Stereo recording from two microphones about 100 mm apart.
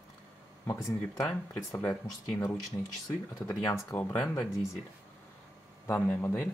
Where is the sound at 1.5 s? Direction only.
25° left (ahead or behind).